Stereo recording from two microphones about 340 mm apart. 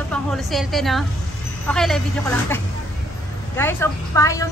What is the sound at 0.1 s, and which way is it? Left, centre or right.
A woman's voice, centre.